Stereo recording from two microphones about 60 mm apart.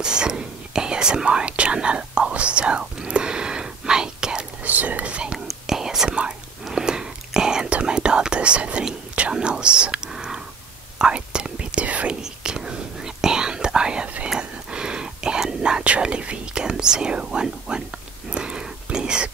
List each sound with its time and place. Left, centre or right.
0.0 s speech: centre
4.6 s speech: right
5.5 s whispering: centre; by 12.2 s right
12.2 s whispering: centre